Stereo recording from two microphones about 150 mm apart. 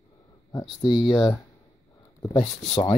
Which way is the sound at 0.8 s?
35° left (ahead or behind).